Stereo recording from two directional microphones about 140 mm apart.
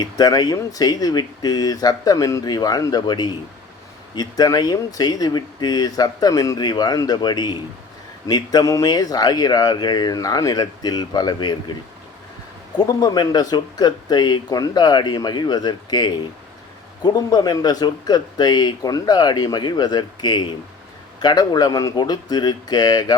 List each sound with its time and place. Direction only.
0.0 s speech: 30° left (ahead or behind)
12.7 s speech: 30° left (ahead or behind)